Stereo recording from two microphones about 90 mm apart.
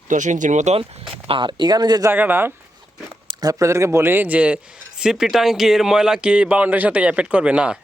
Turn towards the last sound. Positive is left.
turn(degrees=-10)  # may be behind; listen again after turning